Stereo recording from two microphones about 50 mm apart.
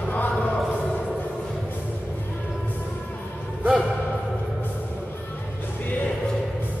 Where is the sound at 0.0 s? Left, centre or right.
Left.